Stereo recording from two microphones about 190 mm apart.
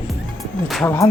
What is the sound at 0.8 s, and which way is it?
Speech, 15° left (ahead or behind).